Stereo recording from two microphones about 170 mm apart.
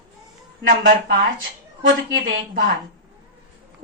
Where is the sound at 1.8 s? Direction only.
90° right.